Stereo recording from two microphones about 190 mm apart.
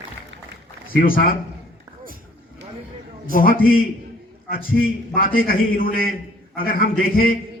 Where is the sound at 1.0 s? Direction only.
50° left (ahead or behind).